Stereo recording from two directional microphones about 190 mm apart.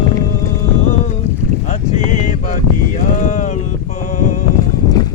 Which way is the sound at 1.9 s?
40° left (ahead or behind).